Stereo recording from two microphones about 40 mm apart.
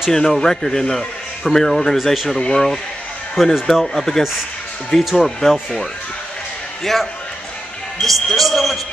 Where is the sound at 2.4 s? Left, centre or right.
Centre.